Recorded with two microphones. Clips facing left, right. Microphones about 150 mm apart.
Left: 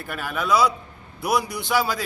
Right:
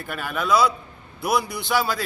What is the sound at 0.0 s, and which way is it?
A man's voice, 5° left (ahead or behind).